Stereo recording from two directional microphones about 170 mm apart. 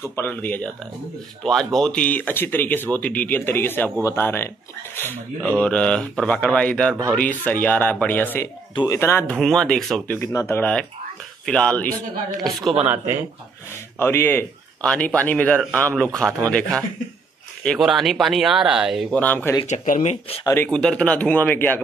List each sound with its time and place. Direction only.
0.1 s speech: 10° left (ahead or behind)
9.4 s speech: 5° left (ahead or behind)
10.1 s speech: 15° left (ahead or behind)
12.8 s speech: 10° right (ahead or behind)
13.9 s speech: 15° left (ahead or behind); by 19.1 s 5° right (ahead or behind)
19.1 s speech: 10° left (ahead or behind)
19.7 s speech: 45° left (ahead or behind)
20.4 s speech: 10° left (ahead or behind)